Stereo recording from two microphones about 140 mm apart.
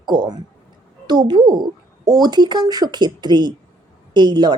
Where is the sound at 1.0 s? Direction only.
30° right (ahead or behind).